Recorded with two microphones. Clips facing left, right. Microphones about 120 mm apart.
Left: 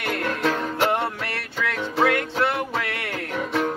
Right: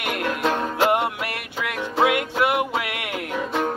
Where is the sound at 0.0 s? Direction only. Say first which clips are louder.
Even; 20° right (ahead or behind).